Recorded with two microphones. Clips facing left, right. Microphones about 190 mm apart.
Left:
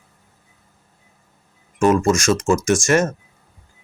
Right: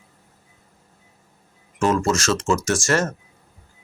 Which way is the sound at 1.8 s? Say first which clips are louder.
Left 4 dB; 15° left (ahead or behind).